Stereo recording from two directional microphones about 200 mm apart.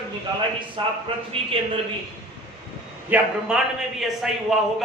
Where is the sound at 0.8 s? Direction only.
25° right (ahead or behind).